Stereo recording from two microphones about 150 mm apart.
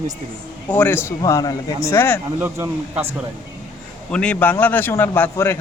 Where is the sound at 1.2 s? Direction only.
25° left (ahead or behind).